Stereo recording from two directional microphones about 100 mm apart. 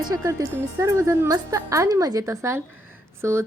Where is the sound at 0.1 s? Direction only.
40° right (ahead or behind).